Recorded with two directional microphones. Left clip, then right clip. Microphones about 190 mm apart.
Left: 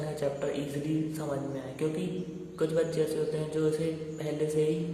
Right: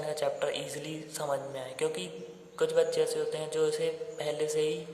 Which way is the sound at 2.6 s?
30° right (ahead or behind).